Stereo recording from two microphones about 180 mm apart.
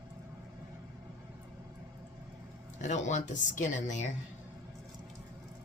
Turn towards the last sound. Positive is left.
turn(degrees=45)  # may be behind; listen again after turning